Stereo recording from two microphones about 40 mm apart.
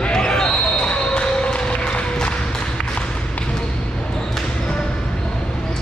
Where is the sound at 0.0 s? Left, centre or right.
Left.